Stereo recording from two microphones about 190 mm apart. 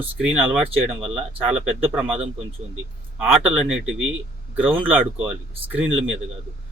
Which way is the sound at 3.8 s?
90° right.